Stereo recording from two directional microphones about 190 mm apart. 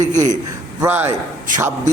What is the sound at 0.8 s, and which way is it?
Speech, 10° right (ahead or behind).